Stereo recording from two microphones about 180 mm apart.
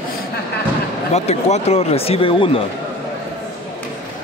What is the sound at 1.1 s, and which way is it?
Speech, 35° left (ahead or behind).